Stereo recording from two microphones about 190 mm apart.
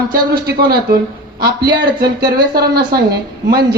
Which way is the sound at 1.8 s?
55° right (ahead or behind).